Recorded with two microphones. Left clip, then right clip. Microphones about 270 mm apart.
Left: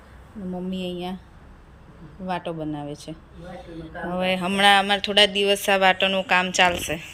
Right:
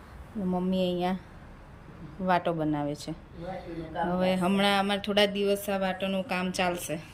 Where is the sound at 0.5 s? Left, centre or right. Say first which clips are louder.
Right 2 dB; centre.